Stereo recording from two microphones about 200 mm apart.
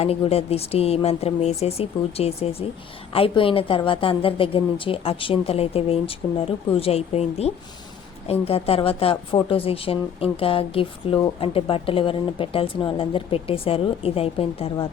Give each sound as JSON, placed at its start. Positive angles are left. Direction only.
{"t": 0.0, "sound": "a woman's voice", "side_deg": 30}